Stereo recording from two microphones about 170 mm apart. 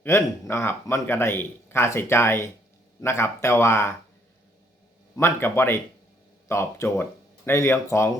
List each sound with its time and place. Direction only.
0.0 s a man's voice: 15° left (ahead or behind)
5.1 s a man's voice: 15° left (ahead or behind)